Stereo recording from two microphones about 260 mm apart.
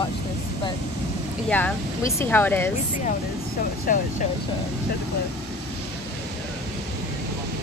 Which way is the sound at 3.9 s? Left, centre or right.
Left.